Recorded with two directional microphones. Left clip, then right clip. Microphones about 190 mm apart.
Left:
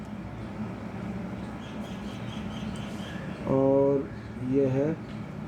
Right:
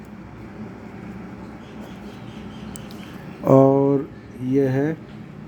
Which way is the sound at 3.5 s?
60° right (ahead or behind).